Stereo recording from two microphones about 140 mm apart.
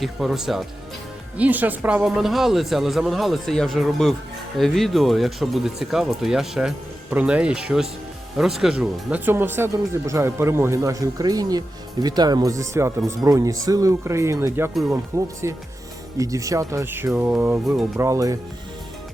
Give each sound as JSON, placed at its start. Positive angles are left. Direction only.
{"t": 0.0, "sound": "speech", "side_deg": 0}